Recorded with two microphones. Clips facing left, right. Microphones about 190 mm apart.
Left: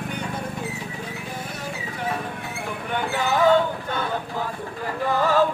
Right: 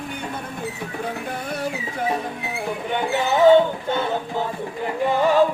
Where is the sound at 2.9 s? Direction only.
20° right (ahead or behind).